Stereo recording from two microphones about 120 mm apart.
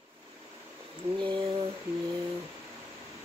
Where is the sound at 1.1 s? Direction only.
40° right (ahead or behind).